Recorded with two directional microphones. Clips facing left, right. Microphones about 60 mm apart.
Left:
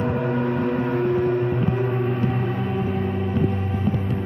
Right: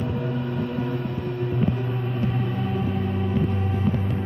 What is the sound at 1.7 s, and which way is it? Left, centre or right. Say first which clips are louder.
Gong: left 5 dB; left.